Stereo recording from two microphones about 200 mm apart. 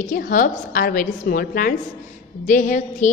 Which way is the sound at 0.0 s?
40° left (ahead or behind).